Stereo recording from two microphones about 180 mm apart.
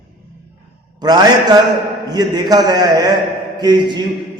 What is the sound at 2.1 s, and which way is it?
A man's voice, 20° right (ahead or behind).